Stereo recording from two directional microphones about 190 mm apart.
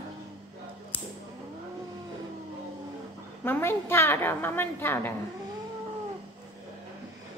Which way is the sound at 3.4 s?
10° left (ahead or behind).